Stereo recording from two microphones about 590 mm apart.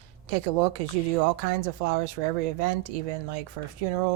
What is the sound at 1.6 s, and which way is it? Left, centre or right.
Speech, right.